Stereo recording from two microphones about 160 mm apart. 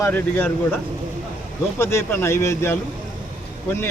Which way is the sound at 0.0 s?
10° left (ahead or behind).